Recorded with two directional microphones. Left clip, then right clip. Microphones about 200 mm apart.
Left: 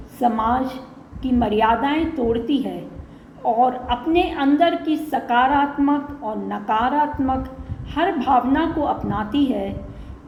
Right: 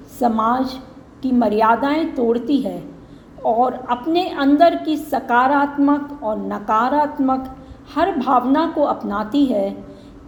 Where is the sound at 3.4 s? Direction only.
40° right (ahead or behind).